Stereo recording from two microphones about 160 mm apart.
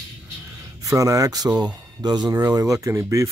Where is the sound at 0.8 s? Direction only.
20° right (ahead or behind).